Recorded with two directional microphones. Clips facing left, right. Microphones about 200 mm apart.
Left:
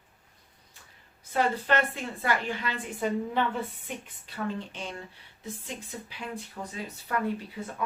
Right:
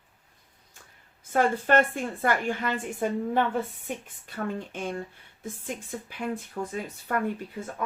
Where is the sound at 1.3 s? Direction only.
50° right (ahead or behind).